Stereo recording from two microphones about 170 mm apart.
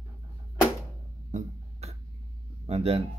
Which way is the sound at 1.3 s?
40° right (ahead or behind).